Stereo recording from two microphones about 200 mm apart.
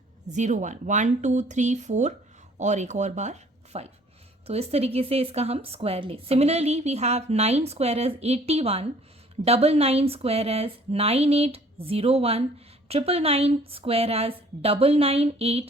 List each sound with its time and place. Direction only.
0.3 s a woman's voice: 35° right (ahead or behind)